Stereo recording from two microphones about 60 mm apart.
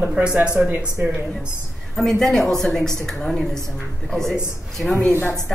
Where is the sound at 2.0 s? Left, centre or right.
Centre.